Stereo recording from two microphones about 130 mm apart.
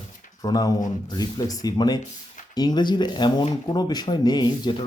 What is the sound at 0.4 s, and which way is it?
Speech, 30° left (ahead or behind).